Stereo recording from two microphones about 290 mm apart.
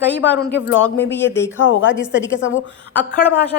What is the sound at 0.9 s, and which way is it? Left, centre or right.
Speech, centre.